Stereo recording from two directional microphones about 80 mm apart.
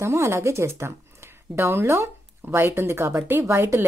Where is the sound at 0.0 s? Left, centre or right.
Right.